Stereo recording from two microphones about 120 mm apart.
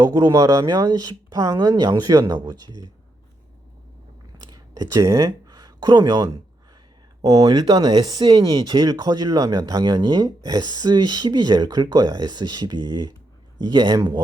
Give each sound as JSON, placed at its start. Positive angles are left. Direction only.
{"t": 0.0, "sound": "speech", "side_deg": -30}
{"t": 4.4, "sound": "a sound", "side_deg": -35}
{"t": 7.2, "sound": "speech", "side_deg": -30}